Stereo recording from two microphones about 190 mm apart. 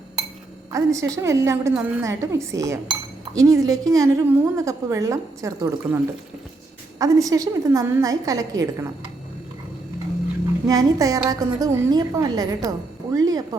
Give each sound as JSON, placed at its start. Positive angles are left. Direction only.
{"t": 0.7, "sound": "a woman's voice", "side_deg": -15}
{"t": 7.0, "sound": "a woman's voice", "side_deg": -20}
{"t": 10.7, "sound": "a woman's voice", "side_deg": -20}